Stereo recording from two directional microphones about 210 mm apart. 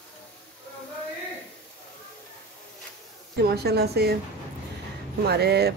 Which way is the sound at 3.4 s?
50° right (ahead or behind).